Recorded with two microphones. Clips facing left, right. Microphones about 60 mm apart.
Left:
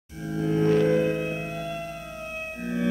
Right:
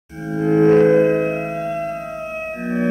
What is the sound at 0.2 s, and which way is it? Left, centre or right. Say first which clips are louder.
Music: right 9 dB; right.